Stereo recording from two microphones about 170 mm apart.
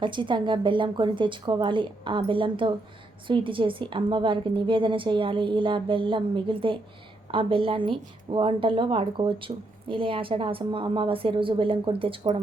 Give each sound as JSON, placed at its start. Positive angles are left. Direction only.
{"t": 0.0, "sound": "a woman's voice", "side_deg": -30}